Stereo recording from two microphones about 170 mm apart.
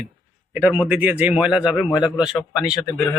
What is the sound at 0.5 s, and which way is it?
Speech, 10° right (ahead or behind).